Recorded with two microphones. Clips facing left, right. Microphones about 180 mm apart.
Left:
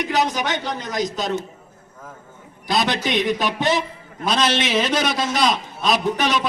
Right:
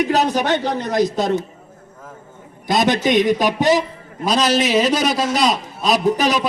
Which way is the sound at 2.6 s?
45° right (ahead or behind).